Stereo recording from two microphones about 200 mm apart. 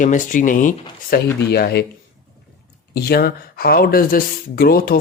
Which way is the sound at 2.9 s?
50° left (ahead or behind).